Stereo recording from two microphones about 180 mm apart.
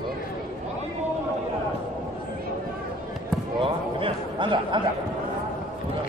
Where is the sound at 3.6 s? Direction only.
30° right (ahead or behind).